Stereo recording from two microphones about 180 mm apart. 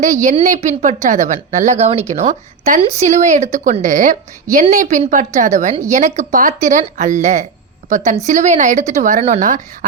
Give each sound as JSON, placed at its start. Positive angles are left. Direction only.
{"t": 0.0, "sound": "a woman's voice", "side_deg": -45}